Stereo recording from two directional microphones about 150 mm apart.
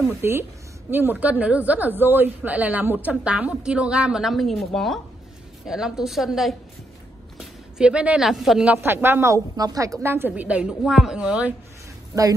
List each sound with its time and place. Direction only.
0.2 s a woman's voice: 15° right (ahead or behind)
8.8 s a woman's voice: 15° right (ahead or behind)